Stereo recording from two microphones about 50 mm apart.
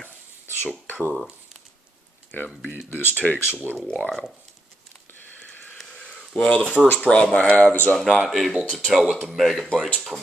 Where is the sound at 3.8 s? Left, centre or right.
Left.